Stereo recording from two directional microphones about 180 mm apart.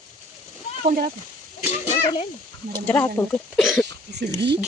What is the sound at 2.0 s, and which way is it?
Speech, 30° left (ahead or behind).